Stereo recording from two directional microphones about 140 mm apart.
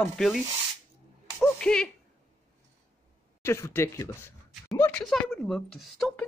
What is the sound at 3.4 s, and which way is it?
Speech, 20° left (ahead or behind).